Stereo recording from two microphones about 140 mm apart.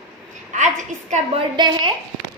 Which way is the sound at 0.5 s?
60° right (ahead or behind).